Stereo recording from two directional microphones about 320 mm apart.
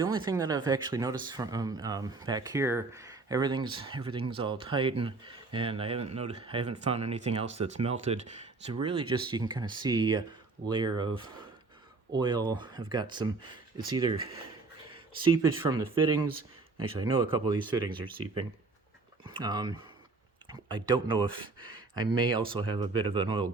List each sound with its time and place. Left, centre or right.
0.3 s speech: centre
12.1 s speech: centre